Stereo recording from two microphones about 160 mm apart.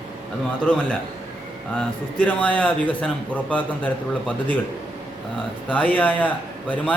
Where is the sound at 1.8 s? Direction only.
10° left (ahead or behind).